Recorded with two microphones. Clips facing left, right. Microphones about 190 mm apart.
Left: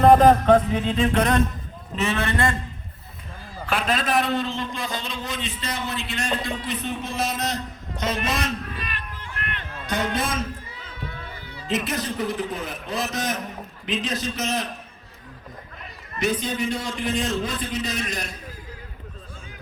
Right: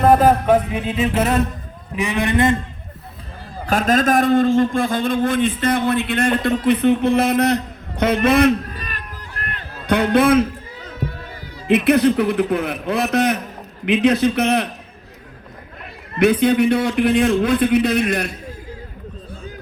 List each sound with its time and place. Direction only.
0.0 s speech: 5° right (ahead or behind)
0.7 s mantra: 10° right (ahead or behind)
3.7 s a man's voice: 45° right (ahead or behind)
8.7 s run: 40° right (ahead or behind)
9.8 s a man's voice: 60° right (ahead or behind)
11.7 s a man's voice: 60° right (ahead or behind)
16.1 s a man's voice: 60° right (ahead or behind)